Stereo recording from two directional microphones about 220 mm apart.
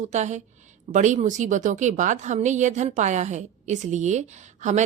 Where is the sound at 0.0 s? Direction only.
30° right (ahead or behind).